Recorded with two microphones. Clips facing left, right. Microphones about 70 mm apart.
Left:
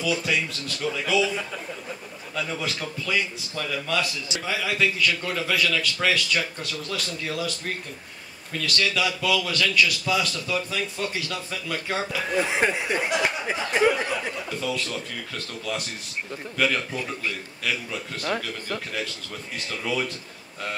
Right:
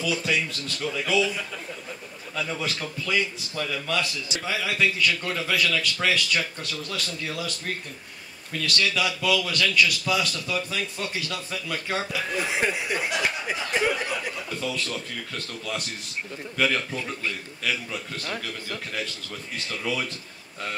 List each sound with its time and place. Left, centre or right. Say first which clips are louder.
0.0 s a man's voice: left 1 dB; centre
2.3 s a man's voice: even; centre
8.7 s a man's voice: left 1 dB; centre
12.4 s speech: left 4 dB; left
14.0 s chuckle: left 2 dB; left
14.6 s a man's voice: left 1 dB; centre
19.7 s a man's voice: left 2 dB; centre